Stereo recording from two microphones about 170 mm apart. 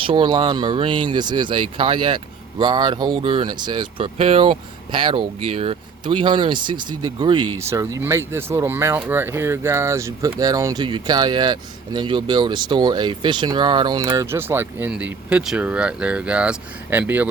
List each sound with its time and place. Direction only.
0.0 s speech: 30° right (ahead or behind); by 17.2 s 10° right (ahead or behind)